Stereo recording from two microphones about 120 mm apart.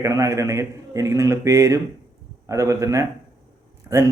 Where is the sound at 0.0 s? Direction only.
25° right (ahead or behind).